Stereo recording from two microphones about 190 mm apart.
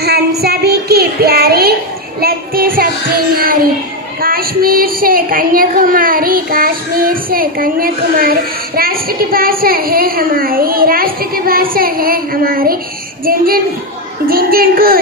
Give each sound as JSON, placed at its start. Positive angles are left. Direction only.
{"t": 0.0, "sound": "child singing", "side_deg": -55}
{"t": 4.2, "sound": "a woman's voice", "side_deg": -50}